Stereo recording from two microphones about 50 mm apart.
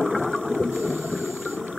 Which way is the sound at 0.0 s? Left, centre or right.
Centre.